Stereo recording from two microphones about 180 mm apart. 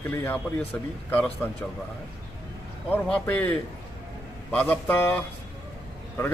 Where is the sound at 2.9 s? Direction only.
10° left (ahead or behind).